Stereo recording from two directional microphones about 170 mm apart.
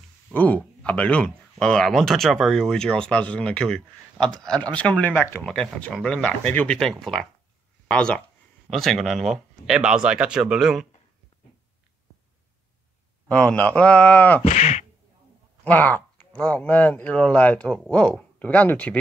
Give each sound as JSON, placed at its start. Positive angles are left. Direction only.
{"t": 0.3, "sound": "speech", "side_deg": 10}
{"t": 13.3, "sound": "speech", "side_deg": 5}
{"t": 14.4, "sound": "speech", "side_deg": 40}
{"t": 15.6, "sound": "speech", "side_deg": 10}